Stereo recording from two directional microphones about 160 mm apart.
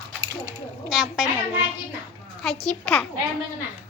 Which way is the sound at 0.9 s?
5° right (ahead or behind).